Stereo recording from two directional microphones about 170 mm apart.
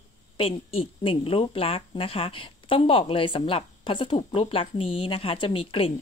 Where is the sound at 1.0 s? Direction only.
35° left (ahead or behind).